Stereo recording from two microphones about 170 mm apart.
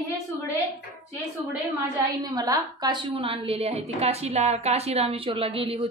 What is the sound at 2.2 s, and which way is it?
A woman's voice, 20° right (ahead or behind).